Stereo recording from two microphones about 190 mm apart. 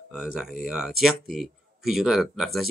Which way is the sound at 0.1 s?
5° right (ahead or behind).